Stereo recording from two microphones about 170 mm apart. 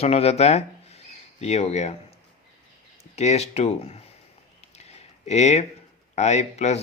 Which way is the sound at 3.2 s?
40° left (ahead or behind).